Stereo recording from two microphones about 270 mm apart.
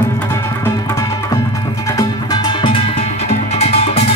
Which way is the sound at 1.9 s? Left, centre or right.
Centre.